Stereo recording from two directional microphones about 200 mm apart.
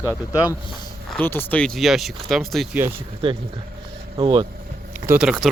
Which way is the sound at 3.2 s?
25° right (ahead or behind).